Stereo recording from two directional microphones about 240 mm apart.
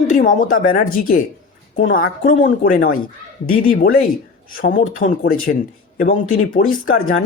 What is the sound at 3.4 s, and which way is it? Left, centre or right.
Speech, left.